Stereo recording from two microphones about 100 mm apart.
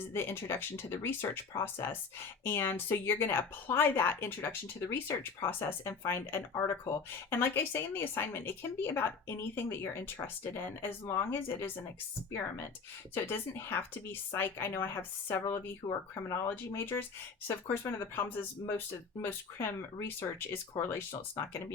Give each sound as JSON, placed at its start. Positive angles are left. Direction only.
{"t": 0.0, "sound": "speech", "side_deg": 20}
{"t": 13.1, "sound": "speech", "side_deg": 25}